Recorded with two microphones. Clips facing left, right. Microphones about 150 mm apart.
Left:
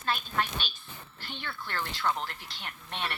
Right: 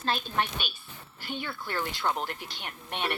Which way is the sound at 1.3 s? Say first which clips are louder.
Right 5 dB; 10° right (ahead or behind).